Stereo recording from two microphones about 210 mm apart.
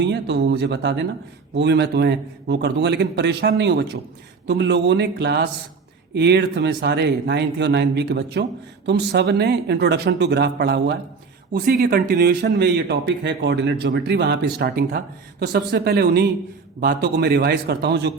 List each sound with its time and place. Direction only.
0.0 s speech: 55° right (ahead or behind)